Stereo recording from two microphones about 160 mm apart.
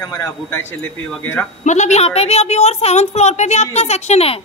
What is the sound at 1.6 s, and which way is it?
A woman's voice, 50° left (ahead or behind).